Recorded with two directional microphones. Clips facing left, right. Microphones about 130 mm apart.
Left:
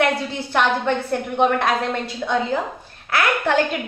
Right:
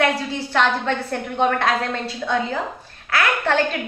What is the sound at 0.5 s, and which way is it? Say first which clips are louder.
A woman's voice: left 1 dB; 15° left (ahead or behind).